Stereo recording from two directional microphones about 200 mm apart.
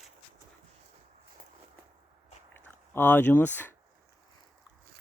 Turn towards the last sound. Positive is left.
turn(degrees=10)  # may be behind; listen again after turning